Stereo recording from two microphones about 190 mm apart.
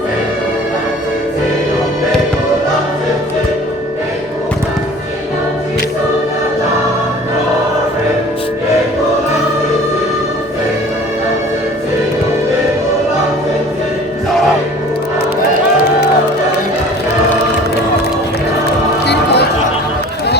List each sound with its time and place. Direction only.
19.0 s music: 60° left (ahead or behind)